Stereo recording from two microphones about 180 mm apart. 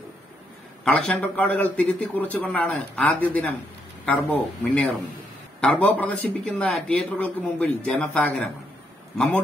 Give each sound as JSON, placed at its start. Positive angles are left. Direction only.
{"t": 0.8, "sound": "speech", "side_deg": 5}